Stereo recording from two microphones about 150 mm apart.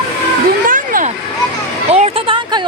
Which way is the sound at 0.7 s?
65° right (ahead or behind).